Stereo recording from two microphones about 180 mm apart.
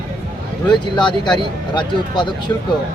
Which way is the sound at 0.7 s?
25° left (ahead or behind).